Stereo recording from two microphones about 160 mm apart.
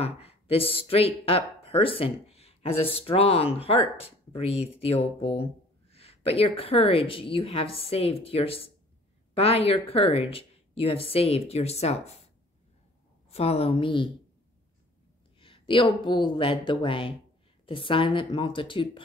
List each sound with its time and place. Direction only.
0.0 s speech: 40° left (ahead or behind)
13.3 s speech: 40° left (ahead or behind)
15.4 s speech: 30° left (ahead or behind)